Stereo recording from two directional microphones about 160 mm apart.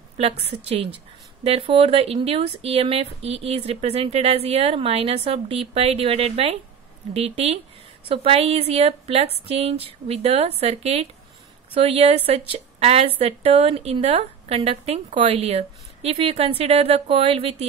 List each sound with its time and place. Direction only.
0.2 s speech: 40° right (ahead or behind)